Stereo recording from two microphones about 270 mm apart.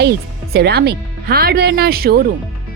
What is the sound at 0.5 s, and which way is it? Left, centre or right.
Speech, right.